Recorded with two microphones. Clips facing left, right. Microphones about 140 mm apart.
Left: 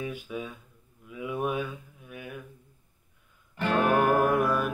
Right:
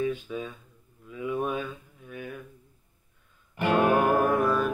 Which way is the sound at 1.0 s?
10° left (ahead or behind).